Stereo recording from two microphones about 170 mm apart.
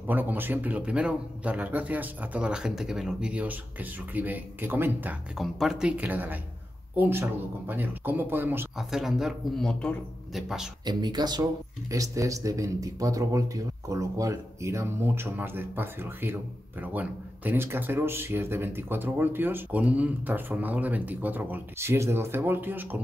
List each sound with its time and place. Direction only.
0.0 s speech: 10° right (ahead or behind)
5.4 s speech: centre (ahead or behind)
10.9 s speech: 25° right (ahead or behind)